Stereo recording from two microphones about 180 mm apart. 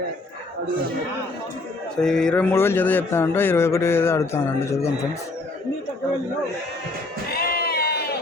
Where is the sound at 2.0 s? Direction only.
5° left (ahead or behind).